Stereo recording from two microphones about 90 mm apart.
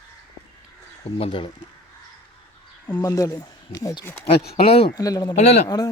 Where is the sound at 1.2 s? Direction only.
80° left.